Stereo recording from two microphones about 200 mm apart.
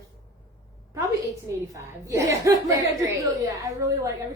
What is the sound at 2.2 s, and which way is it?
A woman's voice, 15° right (ahead or behind).